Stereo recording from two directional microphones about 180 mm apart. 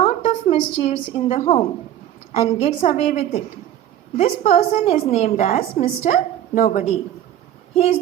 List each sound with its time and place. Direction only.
0.0 s a sound: 40° left (ahead or behind)
0.5 s a woman's voice: 30° left (ahead or behind)
5.5 s a woman's voice: 45° left (ahead or behind)